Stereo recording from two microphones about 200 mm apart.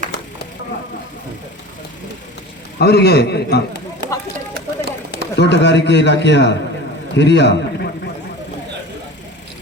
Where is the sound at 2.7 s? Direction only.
55° left (ahead or behind).